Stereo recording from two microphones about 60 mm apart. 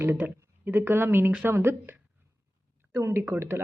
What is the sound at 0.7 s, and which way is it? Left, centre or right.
Speech, right.